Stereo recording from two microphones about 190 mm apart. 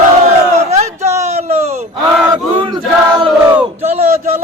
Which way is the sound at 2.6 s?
25° right (ahead or behind).